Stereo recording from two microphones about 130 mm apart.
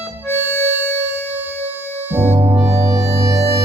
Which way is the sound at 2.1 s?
15° right (ahead or behind).